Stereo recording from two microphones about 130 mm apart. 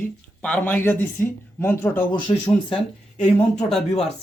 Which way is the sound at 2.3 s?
40° left (ahead or behind).